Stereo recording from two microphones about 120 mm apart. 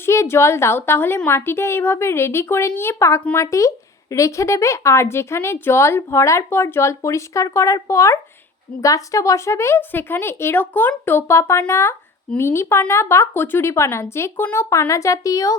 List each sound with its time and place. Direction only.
0.0 s a woman's voice: 20° left (ahead or behind)